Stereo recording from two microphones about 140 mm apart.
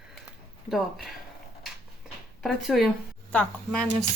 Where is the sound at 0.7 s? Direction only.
Centre (ahead or behind).